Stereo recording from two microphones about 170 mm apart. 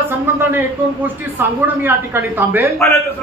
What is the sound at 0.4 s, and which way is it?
A man's voice, 10° right (ahead or behind).